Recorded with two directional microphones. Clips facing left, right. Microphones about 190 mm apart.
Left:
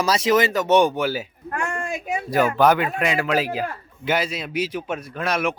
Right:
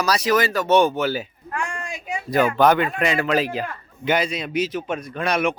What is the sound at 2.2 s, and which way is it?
Speech, 10° left (ahead or behind).